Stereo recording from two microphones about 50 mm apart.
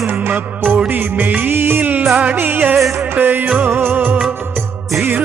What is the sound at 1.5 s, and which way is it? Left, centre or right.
Music, right.